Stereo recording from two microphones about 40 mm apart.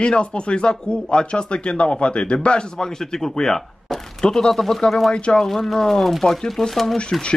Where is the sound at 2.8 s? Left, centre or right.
Centre.